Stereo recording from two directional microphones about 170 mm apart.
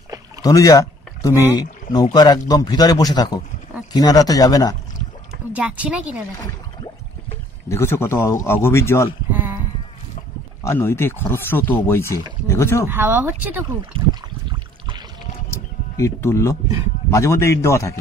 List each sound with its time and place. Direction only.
0.4 s a sound: 20° left (ahead or behind)
1.6 s a man's voice: 25° left (ahead or behind)
5.5 s speech: 5° right (ahead or behind)
7.6 s speech: 15° left (ahead or behind)
9.3 s a sound: 10° right (ahead or behind)
10.6 s speech: 15° left (ahead or behind)
12.8 s speech: 10° right (ahead or behind)
16.0 s speech: 15° left (ahead or behind)